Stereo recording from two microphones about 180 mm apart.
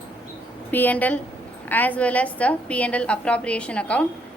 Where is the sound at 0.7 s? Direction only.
10° left (ahead or behind).